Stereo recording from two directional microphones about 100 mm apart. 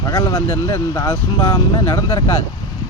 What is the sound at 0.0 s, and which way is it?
Speech, 40° left (ahead or behind).